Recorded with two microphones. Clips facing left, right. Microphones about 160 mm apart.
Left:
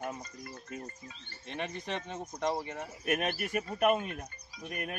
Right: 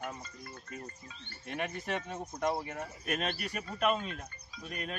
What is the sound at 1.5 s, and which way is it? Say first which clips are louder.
Speech: right 1 dB; 10° right (ahead or behind).